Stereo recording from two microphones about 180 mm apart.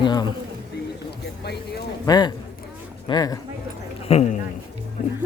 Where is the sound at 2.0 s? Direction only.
20° left (ahead or behind).